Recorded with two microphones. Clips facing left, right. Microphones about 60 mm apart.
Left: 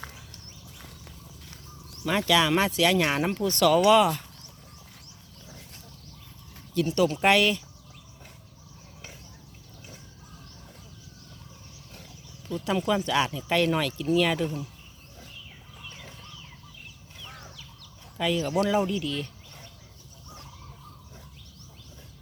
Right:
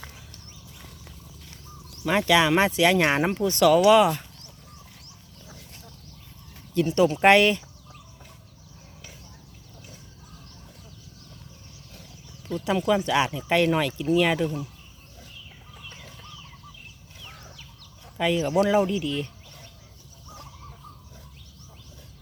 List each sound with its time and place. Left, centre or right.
2.0 s speech: right
6.7 s speech: right
12.5 s a sound: right
13.0 s speech: centre
18.2 s speech: right